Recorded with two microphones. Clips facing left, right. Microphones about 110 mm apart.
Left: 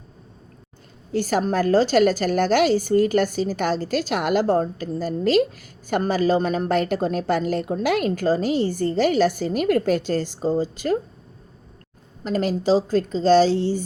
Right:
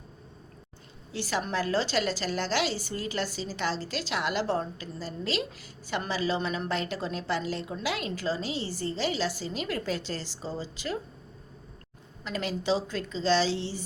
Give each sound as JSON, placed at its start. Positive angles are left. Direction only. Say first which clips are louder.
{"t": 1.1, "sound": "a woman's voice", "louder": "left 9 dB", "side_deg": 45}
{"t": 12.2, "sound": "a woman's voice", "louder": "left 9 dB", "side_deg": 45}